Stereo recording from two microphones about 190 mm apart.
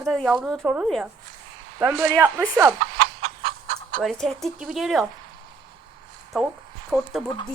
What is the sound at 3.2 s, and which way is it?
Chicken, 30° right (ahead or behind).